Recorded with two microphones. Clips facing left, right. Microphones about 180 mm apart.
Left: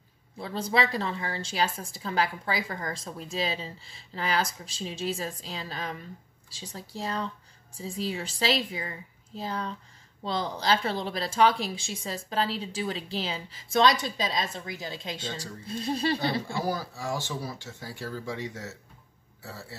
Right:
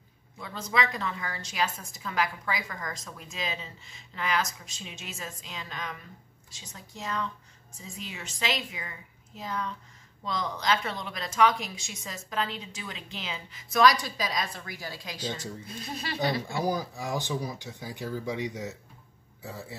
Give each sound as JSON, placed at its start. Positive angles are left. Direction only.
{"t": 0.4, "sound": "a woman's voice", "side_deg": 30}
{"t": 16.4, "sound": "speech", "side_deg": -20}